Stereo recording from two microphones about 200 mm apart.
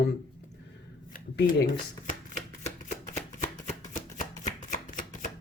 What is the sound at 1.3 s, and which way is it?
Speech, 60° left (ahead or behind).